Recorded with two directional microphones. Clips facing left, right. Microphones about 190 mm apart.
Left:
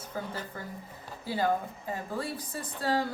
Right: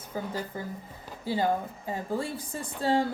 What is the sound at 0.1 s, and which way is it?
Speech, 15° right (ahead or behind).